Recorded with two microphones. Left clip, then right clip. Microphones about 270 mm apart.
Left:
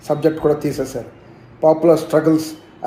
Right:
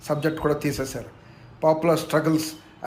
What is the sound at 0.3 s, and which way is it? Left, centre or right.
A man's voice, centre.